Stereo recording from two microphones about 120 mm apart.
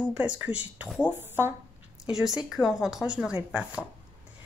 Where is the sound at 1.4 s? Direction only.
20° right (ahead or behind).